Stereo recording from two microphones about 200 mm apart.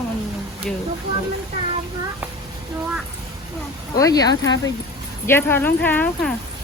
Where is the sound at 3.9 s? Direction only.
15° left (ahead or behind).